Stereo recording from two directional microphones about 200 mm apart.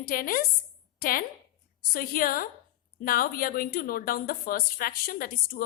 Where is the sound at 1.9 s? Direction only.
45° left (ahead or behind).